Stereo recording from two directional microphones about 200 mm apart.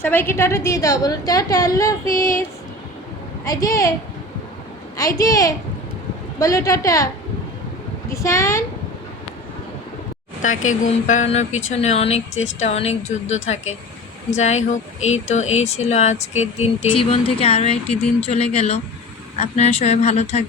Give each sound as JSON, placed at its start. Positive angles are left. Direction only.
{"t": 0.0, "sound": "a woman's voice", "side_deg": 10}
{"t": 3.4, "sound": "a woman's voice", "side_deg": 15}
{"t": 4.9, "sound": "a woman's voice", "side_deg": 15}
{"t": 8.1, "sound": "a woman's voice", "side_deg": 15}
{"t": 10.4, "sound": "speech", "side_deg": 40}